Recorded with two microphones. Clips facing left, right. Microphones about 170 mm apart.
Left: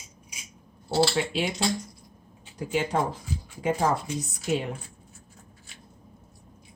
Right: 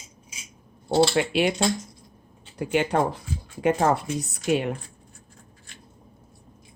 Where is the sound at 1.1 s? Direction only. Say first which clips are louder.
Right 5 dB; 65° right (ahead or behind).